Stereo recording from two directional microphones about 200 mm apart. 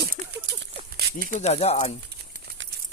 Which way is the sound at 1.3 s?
35° left (ahead or behind).